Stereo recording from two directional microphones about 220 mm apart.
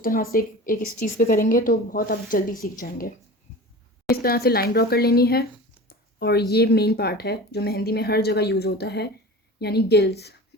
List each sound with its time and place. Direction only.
0.0 s speech: 40° left (ahead or behind)
4.1 s a woman's voice: 45° left (ahead or behind)